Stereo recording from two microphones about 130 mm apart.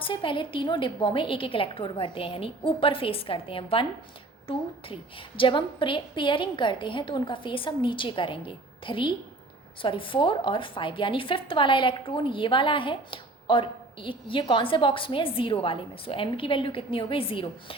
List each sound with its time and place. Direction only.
0.0 s a woman's voice: 40° left (ahead or behind)